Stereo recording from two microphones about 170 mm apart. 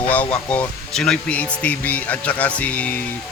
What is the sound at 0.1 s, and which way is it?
Speech, 10° left (ahead or behind).